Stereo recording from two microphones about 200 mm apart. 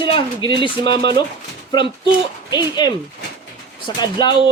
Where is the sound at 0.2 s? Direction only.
25° left (ahead or behind).